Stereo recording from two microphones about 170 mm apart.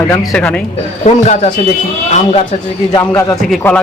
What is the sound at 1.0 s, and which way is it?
Speech, 45° left (ahead or behind).